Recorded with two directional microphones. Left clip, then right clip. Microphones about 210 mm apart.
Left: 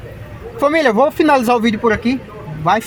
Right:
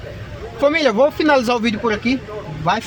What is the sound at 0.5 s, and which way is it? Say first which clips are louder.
Speech: left 2 dB; 45° left (ahead or behind).